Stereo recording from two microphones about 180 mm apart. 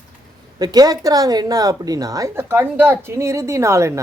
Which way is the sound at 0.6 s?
20° right (ahead or behind).